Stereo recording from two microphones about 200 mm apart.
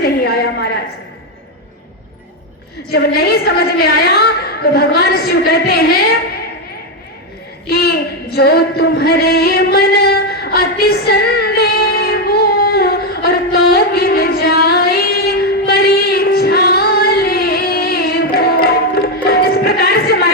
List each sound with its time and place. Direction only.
0.0 s a sound: 50° left (ahead or behind)
2.9 s a woman's voice: 50° left (ahead or behind)
7.7 s a woman's voice: 55° left (ahead or behind)
8.4 s singing: 55° left (ahead or behind)